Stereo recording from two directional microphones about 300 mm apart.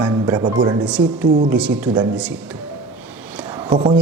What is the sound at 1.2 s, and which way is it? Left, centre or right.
Speech, right.